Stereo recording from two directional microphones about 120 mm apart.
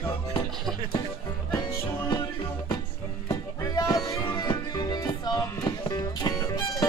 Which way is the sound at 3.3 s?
30° left (ahead or behind).